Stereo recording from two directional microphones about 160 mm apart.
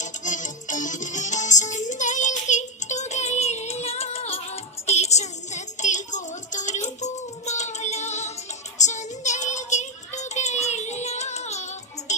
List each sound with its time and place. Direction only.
0.0 s music: 50° left (ahead or behind)